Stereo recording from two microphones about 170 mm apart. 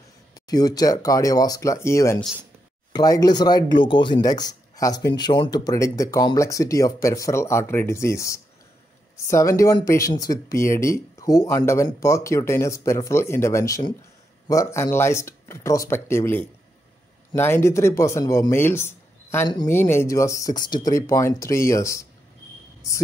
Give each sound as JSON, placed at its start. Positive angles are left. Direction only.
{"t": 0.3, "sound": "speech", "side_deg": 20}